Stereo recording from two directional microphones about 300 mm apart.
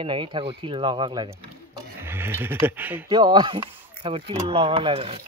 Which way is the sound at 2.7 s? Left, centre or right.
Centre.